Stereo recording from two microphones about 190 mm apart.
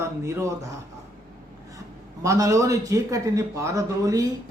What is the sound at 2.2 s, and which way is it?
Speech, 15° right (ahead or behind).